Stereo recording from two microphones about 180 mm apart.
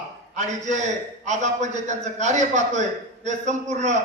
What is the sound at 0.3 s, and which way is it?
A man's voice, 40° right (ahead or behind).